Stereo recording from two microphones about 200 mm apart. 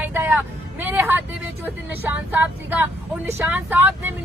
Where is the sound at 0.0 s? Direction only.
10° right (ahead or behind).